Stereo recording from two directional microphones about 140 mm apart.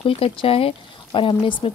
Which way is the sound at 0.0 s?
40° left (ahead or behind).